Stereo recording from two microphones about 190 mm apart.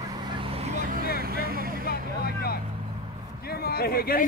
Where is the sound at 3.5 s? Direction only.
55° left (ahead or behind).